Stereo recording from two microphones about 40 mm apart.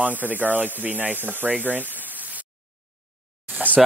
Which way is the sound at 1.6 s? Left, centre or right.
Right.